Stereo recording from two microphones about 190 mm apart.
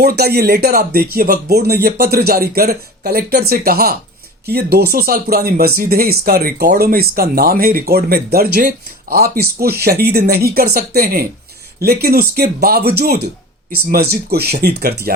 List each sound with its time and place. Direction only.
0.0 s speech: 55° right (ahead or behind)